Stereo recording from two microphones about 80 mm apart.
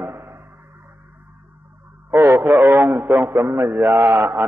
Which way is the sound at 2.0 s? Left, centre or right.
Right.